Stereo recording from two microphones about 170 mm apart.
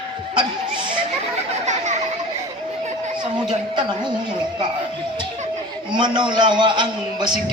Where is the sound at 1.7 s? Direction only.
45° right (ahead or behind).